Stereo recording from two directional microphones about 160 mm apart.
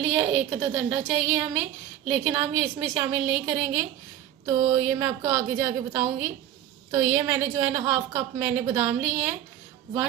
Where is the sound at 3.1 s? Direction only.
10° right (ahead or behind).